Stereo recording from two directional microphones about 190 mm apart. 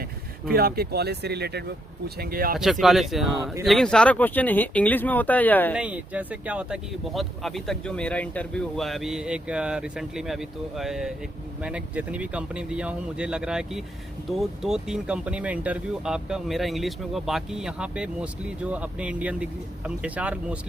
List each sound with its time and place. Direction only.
0.5 s speech: 55° right (ahead or behind)
2.8 s speech: centre (ahead or behind)
5.7 s speech: 5° right (ahead or behind)